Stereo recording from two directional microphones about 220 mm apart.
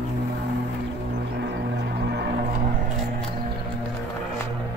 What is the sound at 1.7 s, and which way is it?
Music, 50° right (ahead or behind).